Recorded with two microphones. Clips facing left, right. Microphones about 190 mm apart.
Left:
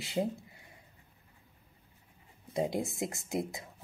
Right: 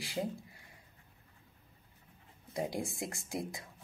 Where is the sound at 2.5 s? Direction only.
20° left (ahead or behind).